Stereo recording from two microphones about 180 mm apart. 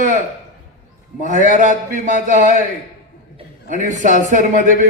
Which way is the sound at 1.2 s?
45° right (ahead or behind).